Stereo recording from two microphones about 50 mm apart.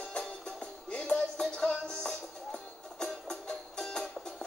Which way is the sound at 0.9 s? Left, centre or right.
Left.